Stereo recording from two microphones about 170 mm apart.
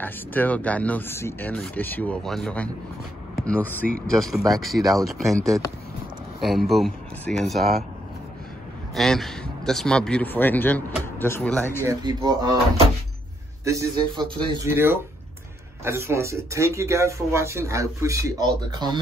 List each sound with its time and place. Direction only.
0.0 s speech: 10° left (ahead or behind)
6.7 s speech: centre (ahead or behind)
8.9 s speech: centre (ahead or behind)
11.8 s a man's voice: 20° right (ahead or behind)
13.7 s a man's voice: 20° right (ahead or behind)
14.7 s speech: 15° right (ahead or behind)